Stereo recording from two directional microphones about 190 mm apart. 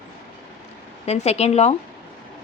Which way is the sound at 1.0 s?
35° left (ahead or behind).